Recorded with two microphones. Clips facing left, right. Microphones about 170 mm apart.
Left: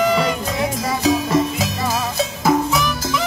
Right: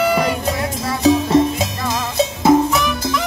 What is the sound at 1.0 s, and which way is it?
Music, 30° right (ahead or behind).